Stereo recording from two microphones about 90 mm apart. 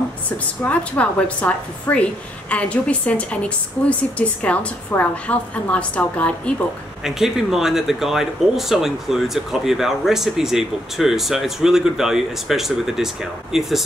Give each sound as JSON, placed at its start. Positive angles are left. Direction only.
{"t": 0.7, "sound": "a woman's voice", "side_deg": 15}
{"t": 7.1, "sound": "speech", "side_deg": -5}